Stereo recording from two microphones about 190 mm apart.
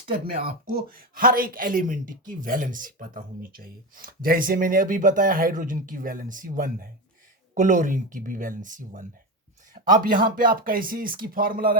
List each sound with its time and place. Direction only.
0.0 s speech: 30° right (ahead or behind)
0.6 s speech: 50° right (ahead or behind)